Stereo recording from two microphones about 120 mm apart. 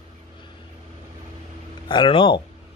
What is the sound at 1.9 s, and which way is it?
Speech, 45° left (ahead or behind).